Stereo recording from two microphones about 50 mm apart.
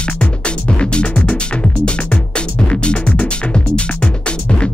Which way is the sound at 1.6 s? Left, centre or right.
Left.